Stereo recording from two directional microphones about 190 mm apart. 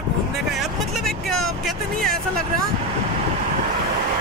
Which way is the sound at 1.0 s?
Centre (ahead or behind).